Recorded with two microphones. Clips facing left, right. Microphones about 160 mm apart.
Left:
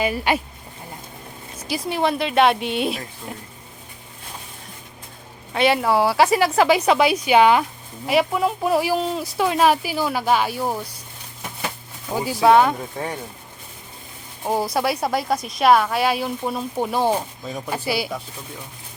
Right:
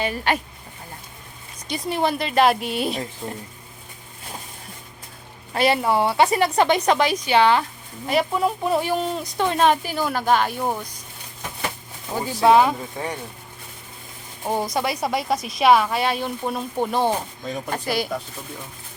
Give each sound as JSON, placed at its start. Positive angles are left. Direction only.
{"t": 0.0, "sound": "speech", "side_deg": 10}
{"t": 1.6, "sound": "a woman's voice", "side_deg": 0}
{"t": 3.2, "sound": "speech", "side_deg": -25}
{"t": 5.5, "sound": "a woman's voice", "side_deg": 0}
{"t": 12.1, "sound": "a woman's voice", "side_deg": 5}
{"t": 14.4, "sound": "a woman's voice", "side_deg": 5}